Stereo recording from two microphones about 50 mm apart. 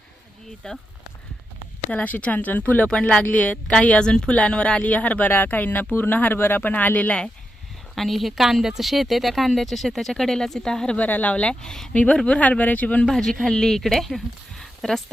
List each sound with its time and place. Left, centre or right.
0.6 s speech: centre
1.9 s speech: left
2.9 s speech: left
3.8 s speech: centre
7.9 s speech: centre
10.9 s speech: left; by 11.9 s centre
11.9 s speech: left
13.1 s speech: centre